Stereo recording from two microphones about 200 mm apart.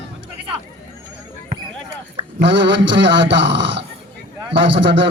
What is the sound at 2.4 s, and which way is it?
Speech, 60° right (ahead or behind).